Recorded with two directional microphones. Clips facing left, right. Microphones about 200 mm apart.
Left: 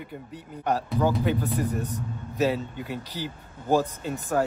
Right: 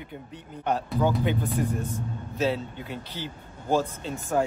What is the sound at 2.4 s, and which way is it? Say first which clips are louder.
Speech: left 2 dB; 10° left (ahead or behind).